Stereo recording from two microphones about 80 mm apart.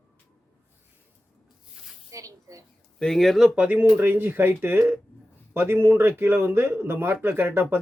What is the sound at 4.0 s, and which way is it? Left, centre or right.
Speech, right.